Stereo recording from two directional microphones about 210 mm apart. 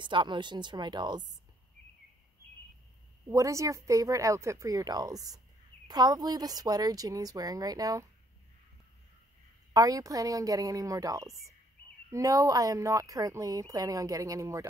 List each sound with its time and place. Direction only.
0.0 s speech: 20° right (ahead or behind)
3.3 s speech: 15° right (ahead or behind)
9.8 s speech: 15° right (ahead or behind)